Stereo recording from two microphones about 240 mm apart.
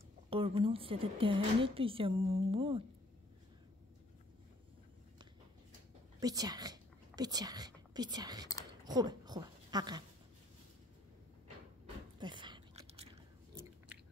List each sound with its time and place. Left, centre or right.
0.3 s a woman's voice: right
6.1 s speech: centre
11.8 s a sound: centre